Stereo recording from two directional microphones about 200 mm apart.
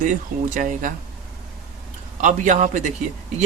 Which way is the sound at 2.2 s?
40° right (ahead or behind).